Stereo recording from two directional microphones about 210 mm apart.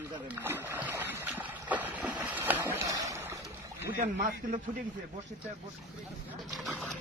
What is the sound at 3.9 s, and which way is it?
Speech, 40° right (ahead or behind).